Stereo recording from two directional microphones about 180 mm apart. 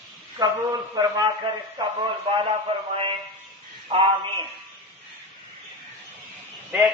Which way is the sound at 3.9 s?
30° right (ahead or behind).